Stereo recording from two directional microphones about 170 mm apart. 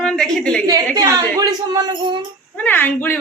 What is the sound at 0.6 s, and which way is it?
A woman's voice, 20° right (ahead or behind).